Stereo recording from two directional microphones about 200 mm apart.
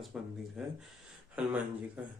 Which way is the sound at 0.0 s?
Centre (ahead or behind).